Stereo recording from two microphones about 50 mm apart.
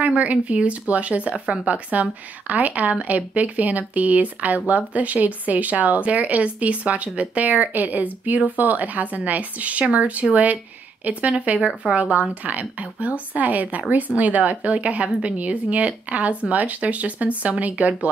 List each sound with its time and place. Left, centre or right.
0.0 s a woman's voice: right